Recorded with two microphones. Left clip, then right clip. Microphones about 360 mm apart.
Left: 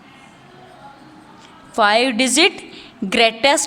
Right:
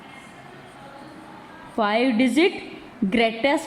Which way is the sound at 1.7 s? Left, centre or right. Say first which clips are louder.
Left 6 dB; left.